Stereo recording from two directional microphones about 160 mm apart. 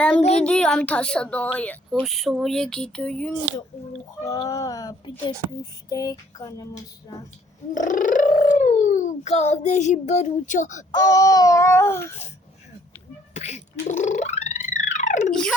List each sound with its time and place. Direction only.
0.2 s child singing: 40° left (ahead or behind)
0.4 s a woman's voice: 5° left (ahead or behind)
4.4 s babbling: 20° left (ahead or behind)
7.7 s speech: 55° left (ahead or behind)
10.9 s babbling: 25° left (ahead or behind)
13.3 s music: 45° left (ahead or behind)
15.3 s speech: 5° left (ahead or behind)